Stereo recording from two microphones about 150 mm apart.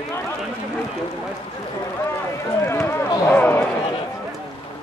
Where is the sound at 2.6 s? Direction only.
15° left (ahead or behind).